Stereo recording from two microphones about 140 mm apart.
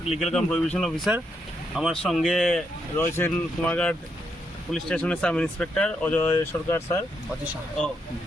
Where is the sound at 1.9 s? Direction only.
5° left (ahead or behind).